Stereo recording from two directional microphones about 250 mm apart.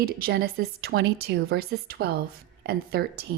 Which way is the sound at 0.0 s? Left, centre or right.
Right.